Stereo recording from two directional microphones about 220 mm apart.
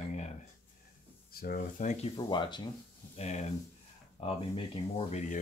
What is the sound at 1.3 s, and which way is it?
Speech, 40° left (ahead or behind).